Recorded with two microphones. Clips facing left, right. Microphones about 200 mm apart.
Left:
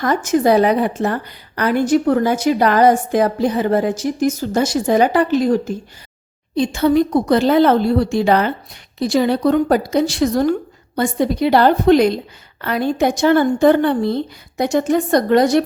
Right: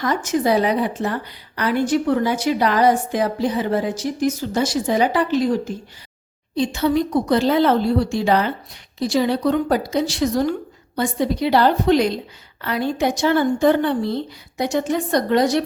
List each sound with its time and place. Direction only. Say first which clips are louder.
0.0 s a woman's voice: left 4 dB; 50° left (ahead or behind)